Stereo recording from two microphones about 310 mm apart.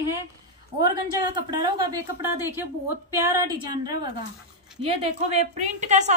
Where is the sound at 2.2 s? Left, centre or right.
Centre.